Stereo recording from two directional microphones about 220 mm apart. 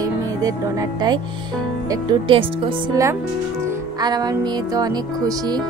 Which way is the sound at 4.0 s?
15° right (ahead or behind).